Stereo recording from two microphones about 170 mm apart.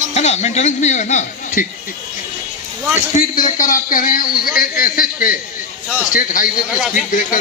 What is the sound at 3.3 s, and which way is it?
A man's voice, 50° left (ahead or behind).